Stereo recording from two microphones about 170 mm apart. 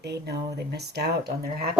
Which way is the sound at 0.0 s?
75° right (ahead or behind).